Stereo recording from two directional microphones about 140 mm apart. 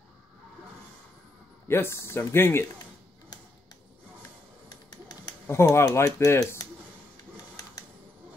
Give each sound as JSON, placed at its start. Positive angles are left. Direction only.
{"t": 1.7, "sound": "speech", "side_deg": 15}
{"t": 5.5, "sound": "speech", "side_deg": 20}